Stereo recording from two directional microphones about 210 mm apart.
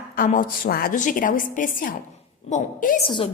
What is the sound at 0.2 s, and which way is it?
A woman's voice, 40° left (ahead or behind).